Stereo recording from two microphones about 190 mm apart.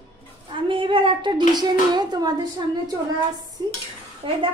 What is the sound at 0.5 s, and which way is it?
A child's voice, 25° right (ahead or behind).